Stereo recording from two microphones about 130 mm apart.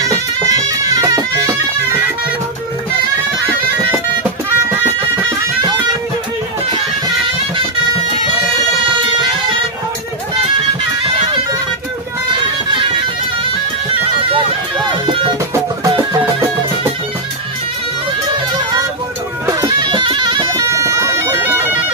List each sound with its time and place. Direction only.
0.0 s bagpipes: 25° right (ahead or behind)
14.3 s music: 35° right (ahead or behind)
19.4 s music: 35° right (ahead or behind)
20.6 s bagpipes: 25° right (ahead or behind)